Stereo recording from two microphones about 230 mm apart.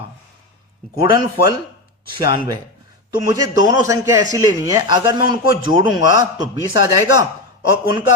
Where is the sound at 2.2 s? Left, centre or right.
Centre.